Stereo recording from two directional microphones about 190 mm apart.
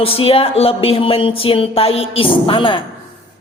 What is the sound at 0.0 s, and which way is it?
Speech, 30° left (ahead or behind).